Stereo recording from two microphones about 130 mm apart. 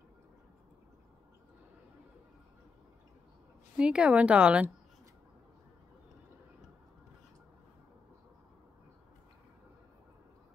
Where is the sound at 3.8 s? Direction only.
10° right (ahead or behind).